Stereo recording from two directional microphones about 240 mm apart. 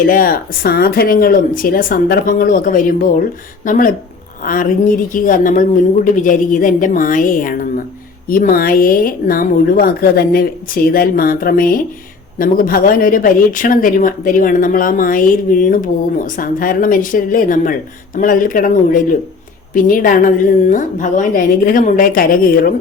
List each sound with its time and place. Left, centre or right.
0.1 s speech: left